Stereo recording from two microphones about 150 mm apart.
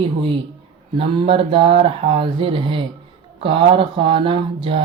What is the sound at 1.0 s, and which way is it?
Speech, 35° right (ahead or behind).